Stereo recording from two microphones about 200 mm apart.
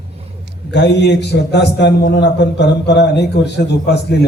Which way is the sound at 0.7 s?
60° left (ahead or behind).